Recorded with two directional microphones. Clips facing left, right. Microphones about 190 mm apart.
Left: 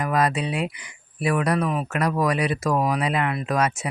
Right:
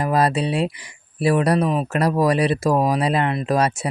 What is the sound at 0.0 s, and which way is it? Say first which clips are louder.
Speech: right 3 dB; 30° right (ahead or behind).